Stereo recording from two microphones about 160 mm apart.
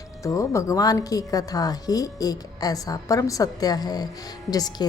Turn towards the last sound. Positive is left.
turn(degrees=25)  # may be behind; listen again after turning